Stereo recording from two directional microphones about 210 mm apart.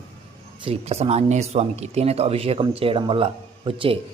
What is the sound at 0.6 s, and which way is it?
Speech, 30° right (ahead or behind).